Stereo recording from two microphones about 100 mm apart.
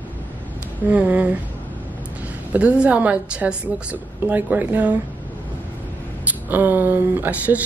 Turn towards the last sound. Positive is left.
turn(degrees=-15)  # may be behind; listen again after turning